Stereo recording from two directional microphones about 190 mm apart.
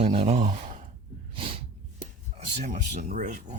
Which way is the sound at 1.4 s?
30° right (ahead or behind).